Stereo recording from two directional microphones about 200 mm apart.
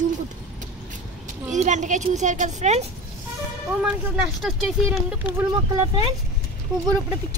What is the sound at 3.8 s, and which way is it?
Speech, 5° right (ahead or behind).